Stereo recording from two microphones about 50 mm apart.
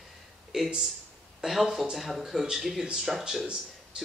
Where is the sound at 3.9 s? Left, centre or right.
Centre.